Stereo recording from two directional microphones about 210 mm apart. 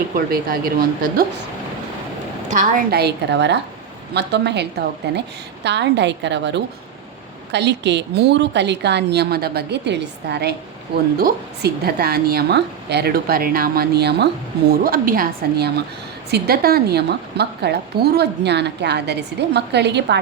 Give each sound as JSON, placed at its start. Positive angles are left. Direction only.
{"t": 0.3, "sound": "a woman's voice", "side_deg": -45}
{"t": 2.5, "sound": "a woman's voice", "side_deg": -40}